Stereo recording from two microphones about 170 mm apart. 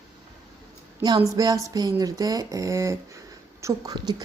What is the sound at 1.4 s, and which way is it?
A woman's voice, 20° right (ahead or behind).